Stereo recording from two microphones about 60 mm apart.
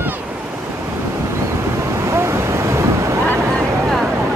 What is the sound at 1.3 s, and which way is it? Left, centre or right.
Waves, right.